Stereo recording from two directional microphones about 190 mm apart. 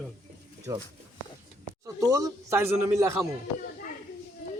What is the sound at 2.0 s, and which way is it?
A man's voice, 15° right (ahead or behind).